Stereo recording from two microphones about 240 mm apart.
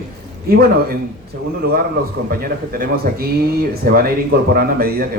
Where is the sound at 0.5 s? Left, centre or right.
Right.